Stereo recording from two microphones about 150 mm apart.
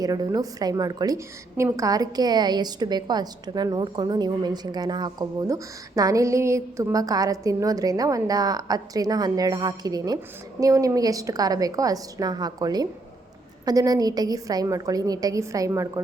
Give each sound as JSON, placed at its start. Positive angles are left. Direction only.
{"t": 0.0, "sound": "a woman's voice", "side_deg": -25}